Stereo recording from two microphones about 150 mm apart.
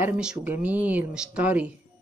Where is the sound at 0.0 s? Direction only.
10° right (ahead or behind).